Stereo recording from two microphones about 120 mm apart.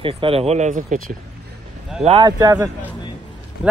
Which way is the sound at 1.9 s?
5° right (ahead or behind).